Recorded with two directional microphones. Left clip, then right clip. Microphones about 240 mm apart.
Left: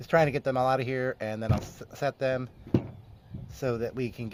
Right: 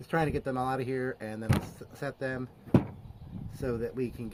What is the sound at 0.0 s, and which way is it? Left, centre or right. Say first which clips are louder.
Speech: left 6 dB; left.